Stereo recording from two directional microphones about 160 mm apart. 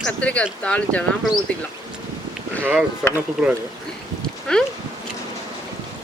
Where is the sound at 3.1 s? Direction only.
10° right (ahead or behind).